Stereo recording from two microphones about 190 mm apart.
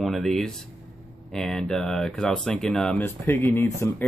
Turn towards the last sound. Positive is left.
turn(degrees=10)  # may be behind; listen again after turning